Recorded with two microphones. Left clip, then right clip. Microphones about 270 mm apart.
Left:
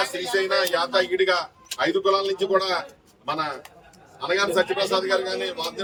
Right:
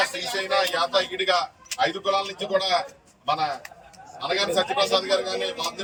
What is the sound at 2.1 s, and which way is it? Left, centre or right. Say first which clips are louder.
Speech: left 3 dB; centre.